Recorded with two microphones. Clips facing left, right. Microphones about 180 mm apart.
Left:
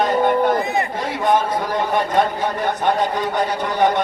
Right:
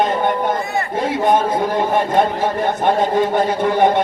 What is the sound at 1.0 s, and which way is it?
A man's voice, 25° right (ahead or behind).